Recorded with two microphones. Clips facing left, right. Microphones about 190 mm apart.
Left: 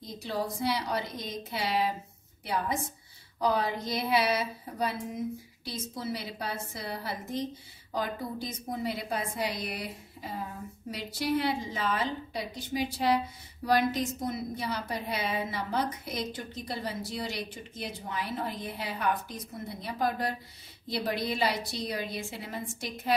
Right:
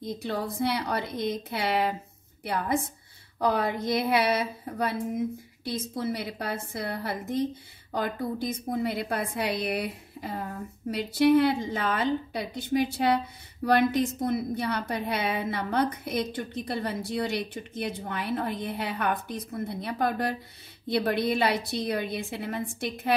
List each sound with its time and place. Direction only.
0.0 s a woman's voice: 60° right (ahead or behind)
3.3 s a woman's voice: 55° right (ahead or behind)